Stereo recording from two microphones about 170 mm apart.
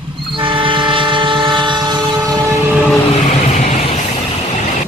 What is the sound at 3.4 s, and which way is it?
Vehicle, 45° left (ahead or behind).